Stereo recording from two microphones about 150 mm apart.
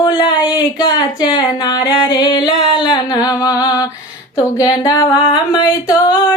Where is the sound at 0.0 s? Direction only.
35° left (ahead or behind).